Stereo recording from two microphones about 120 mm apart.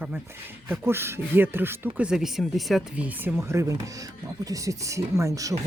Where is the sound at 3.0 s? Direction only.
20° right (ahead or behind).